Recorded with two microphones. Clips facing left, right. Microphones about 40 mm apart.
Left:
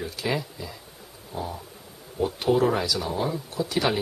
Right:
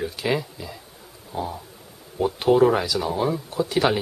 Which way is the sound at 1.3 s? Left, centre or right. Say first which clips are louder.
Right 4 dB; right.